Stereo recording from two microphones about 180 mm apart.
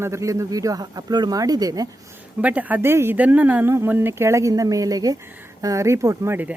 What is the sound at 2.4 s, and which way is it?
Speech, 10° right (ahead or behind).